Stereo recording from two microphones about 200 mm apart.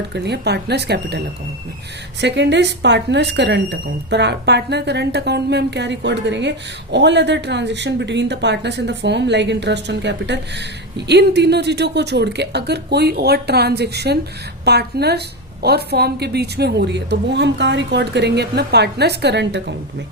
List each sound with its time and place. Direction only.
0.1 s speech: 55° right (ahead or behind)
2.2 s speech: 60° right (ahead or behind)